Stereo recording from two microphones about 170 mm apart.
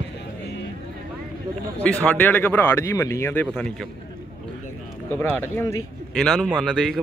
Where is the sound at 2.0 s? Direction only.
10° left (ahead or behind).